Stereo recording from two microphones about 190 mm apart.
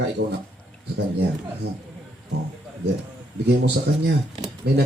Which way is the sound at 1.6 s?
60° right (ahead or behind).